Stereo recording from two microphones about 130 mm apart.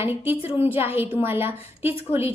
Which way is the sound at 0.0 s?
15° right (ahead or behind).